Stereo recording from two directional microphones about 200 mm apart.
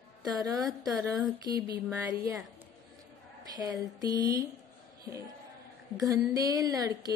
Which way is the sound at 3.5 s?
20° right (ahead or behind).